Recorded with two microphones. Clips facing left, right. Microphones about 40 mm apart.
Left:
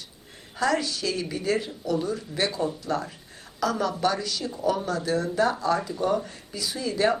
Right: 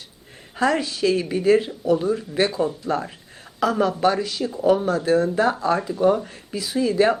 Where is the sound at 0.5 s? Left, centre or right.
Right.